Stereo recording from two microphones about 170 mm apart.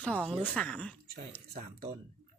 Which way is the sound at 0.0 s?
5° left (ahead or behind).